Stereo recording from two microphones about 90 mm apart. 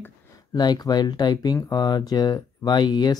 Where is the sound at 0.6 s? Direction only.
50° left (ahead or behind).